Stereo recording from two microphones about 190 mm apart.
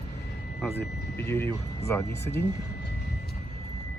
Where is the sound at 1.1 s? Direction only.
10° left (ahead or behind).